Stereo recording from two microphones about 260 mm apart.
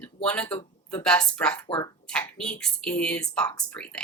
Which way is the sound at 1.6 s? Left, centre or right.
Centre.